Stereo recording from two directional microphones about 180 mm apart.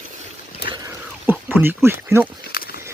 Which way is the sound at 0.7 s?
20° right (ahead or behind).